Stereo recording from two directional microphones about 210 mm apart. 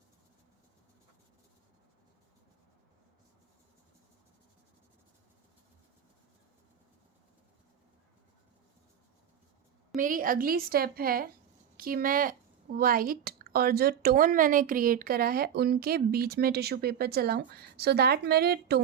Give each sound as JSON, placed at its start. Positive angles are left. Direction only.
{"t": 9.9, "sound": "speech", "side_deg": -40}